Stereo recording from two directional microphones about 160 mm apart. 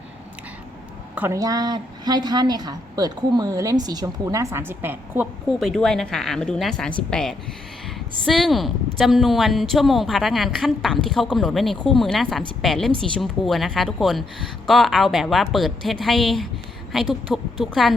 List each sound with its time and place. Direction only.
1.1 s a sound: 10° right (ahead or behind)
1.4 s a woman's voice: 25° right (ahead or behind)
5.5 s a woman's voice: centre (ahead or behind)